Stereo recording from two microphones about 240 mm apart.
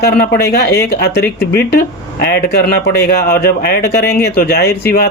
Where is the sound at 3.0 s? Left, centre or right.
Left.